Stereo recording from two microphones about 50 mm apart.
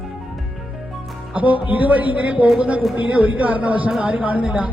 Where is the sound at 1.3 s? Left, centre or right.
Right.